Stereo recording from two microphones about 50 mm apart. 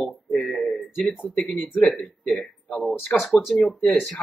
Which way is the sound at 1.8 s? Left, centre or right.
Left.